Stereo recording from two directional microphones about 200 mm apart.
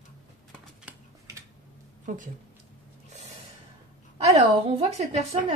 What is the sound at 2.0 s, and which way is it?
Speech, 40° right (ahead or behind).